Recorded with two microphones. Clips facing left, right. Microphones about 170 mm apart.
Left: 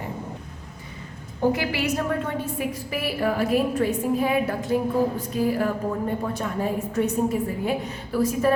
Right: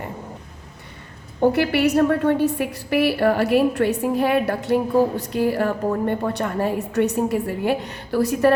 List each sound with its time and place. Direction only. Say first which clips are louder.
1.4 s a woman's voice: right 6 dB; 65° right (ahead or behind)